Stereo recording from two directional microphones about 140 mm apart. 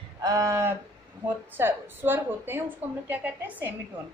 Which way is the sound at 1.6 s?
15° right (ahead or behind).